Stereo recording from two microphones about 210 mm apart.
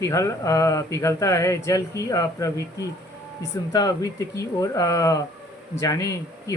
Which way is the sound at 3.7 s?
15° left (ahead or behind).